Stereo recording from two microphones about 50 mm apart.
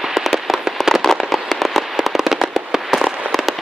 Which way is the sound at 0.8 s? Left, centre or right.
Centre.